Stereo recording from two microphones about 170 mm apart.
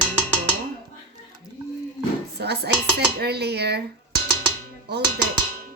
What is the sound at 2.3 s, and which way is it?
Speech, 75° right (ahead or behind).